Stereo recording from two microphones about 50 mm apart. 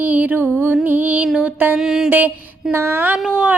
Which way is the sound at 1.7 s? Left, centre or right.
Centre.